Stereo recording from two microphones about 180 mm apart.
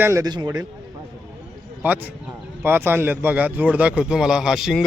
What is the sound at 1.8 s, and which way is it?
Speech, 10° right (ahead or behind).